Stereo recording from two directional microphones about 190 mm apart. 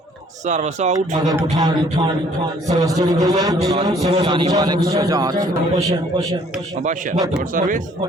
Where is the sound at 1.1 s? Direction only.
20° right (ahead or behind).